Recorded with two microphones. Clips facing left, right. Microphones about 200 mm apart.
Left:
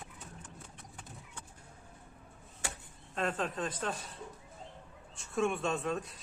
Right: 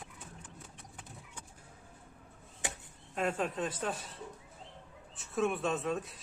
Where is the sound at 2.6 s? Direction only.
20° right (ahead or behind).